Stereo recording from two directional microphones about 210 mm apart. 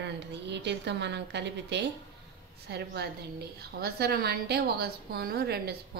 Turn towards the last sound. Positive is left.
turn(degrees=-50)  # may be behind; listen again after turning